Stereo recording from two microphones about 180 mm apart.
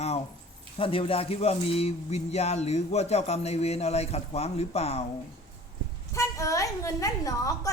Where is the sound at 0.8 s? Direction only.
30° left (ahead or behind).